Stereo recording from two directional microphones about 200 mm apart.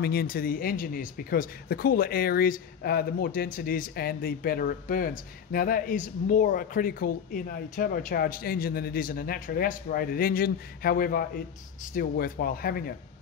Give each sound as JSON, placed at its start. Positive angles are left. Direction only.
{"t": 0.0, "sound": "speech", "side_deg": 50}